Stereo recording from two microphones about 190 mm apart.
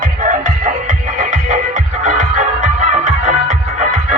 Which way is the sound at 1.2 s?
40° right (ahead or behind).